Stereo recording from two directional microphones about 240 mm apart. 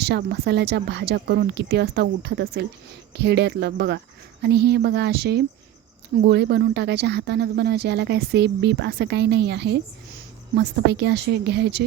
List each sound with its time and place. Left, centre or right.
0.0 s speech: right